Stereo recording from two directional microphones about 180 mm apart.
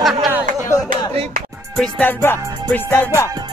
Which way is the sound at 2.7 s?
10° left (ahead or behind).